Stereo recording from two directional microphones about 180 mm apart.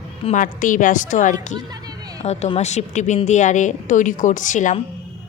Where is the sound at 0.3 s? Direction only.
45° left (ahead or behind).